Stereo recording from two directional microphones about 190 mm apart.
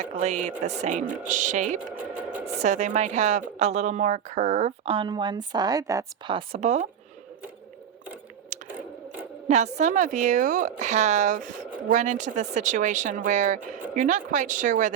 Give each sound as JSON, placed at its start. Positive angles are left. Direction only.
{"t": 0.2, "sound": "a woman's voice", "side_deg": -35}
{"t": 8.5, "sound": "biting", "side_deg": -40}
{"t": 9.5, "sound": "a woman's voice", "side_deg": -40}